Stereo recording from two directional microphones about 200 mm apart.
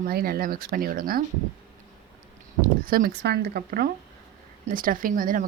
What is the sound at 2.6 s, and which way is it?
Speech, 50° right (ahead or behind).